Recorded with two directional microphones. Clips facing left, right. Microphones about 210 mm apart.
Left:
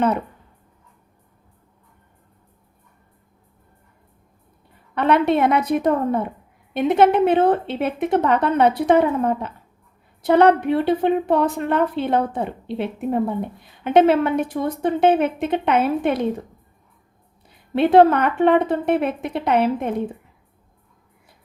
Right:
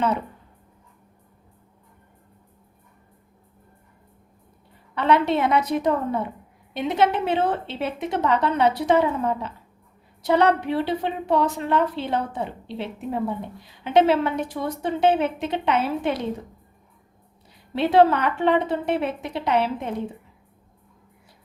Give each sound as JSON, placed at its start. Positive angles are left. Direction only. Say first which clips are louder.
{"t": 4.9, "sound": "a woman's voice", "louder": "left 3 dB", "side_deg": 55}
{"t": 17.7, "sound": "a woman's voice", "louder": "left 4 dB", "side_deg": 55}